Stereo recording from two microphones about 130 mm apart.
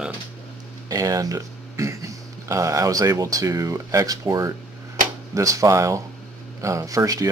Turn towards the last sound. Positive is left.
turn(degrees=-25)  # may be behind; listen again after turning